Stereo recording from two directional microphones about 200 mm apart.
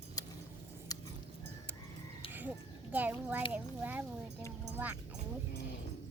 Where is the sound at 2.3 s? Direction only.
10° right (ahead or behind).